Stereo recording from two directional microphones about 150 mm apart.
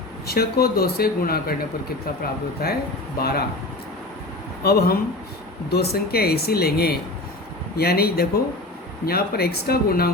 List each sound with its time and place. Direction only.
0.3 s speech: 90° left
4.6 s speech: 90° left